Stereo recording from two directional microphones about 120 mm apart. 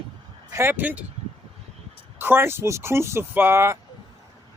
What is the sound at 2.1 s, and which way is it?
Speech, 20° right (ahead or behind).